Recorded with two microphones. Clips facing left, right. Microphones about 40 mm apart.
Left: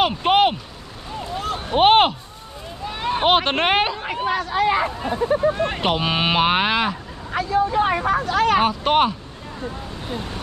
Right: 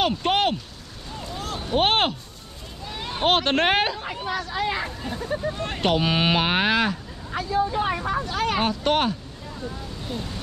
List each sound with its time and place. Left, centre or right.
0.0 s speech: centre
1.1 s a sound: left
1.8 s speech: centre
4.0 s speech: left; by 7.0 s centre
7.3 s a woman's voice: left
7.7 s speech: left
8.5 s speech: centre
10.0 s speech: left